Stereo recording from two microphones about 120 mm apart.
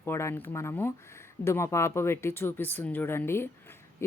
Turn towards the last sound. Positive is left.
turn(degrees=20)  # may be behind; listen again after turning